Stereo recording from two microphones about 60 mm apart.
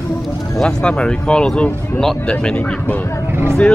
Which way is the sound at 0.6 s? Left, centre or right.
Centre.